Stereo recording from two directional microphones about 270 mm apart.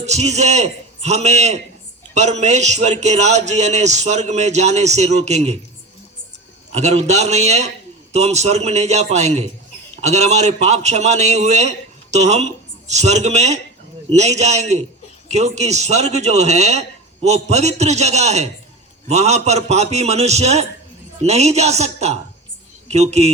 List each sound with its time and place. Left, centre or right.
0.0 s a man's voice: right
6.7 s a man's voice: right